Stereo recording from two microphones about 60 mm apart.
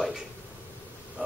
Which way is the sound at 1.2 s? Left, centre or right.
Right.